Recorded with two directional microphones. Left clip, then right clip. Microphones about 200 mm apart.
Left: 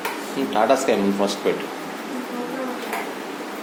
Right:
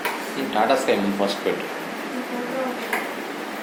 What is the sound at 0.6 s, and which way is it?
Speech, 30° left (ahead or behind).